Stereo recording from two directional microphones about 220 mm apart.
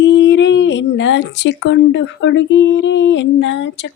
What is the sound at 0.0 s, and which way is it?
Speech, 55° left (ahead or behind).